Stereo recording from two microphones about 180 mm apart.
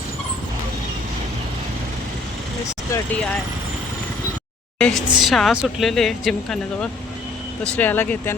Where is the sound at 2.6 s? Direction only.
15° left (ahead or behind).